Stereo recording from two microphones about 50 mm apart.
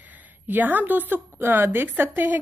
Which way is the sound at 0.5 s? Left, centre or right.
Right.